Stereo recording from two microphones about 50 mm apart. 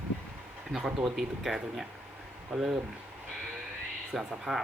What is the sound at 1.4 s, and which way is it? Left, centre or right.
Speech, centre.